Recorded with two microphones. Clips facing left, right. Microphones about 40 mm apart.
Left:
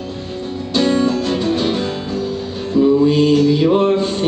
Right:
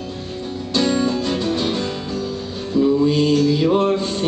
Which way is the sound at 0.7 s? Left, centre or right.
Centre.